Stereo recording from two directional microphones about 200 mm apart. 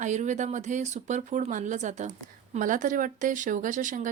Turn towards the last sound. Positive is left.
turn(degrees=-40)  # may be behind; listen again after turning